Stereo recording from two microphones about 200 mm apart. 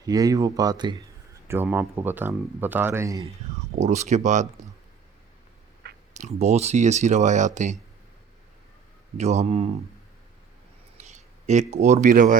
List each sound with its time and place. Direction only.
0.0 s speech: 20° right (ahead or behind)
1.5 s speech: 10° right (ahead or behind)
3.8 s speech: 35° right (ahead or behind)
6.1 s speech: 35° right (ahead or behind)
9.1 s speech: 35° right (ahead or behind)
10.9 s a sound: 35° right (ahead or behind)
11.7 s speech: 35° right (ahead or behind)